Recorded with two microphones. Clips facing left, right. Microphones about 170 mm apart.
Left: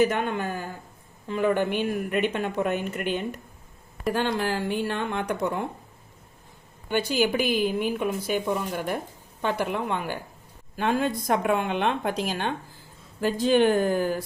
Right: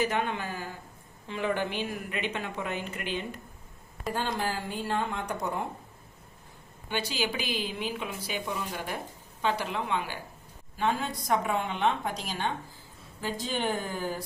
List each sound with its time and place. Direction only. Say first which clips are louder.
0.0 s a woman's voice: left 6 dB; 50° left (ahead or behind)
4.1 s a woman's voice: left 5 dB; 75° left (ahead or behind)
6.9 s a woman's voice: left 8 dB; 50° left (ahead or behind)